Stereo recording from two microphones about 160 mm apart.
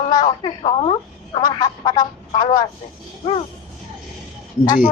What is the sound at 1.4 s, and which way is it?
A child's voice, 25° left (ahead or behind).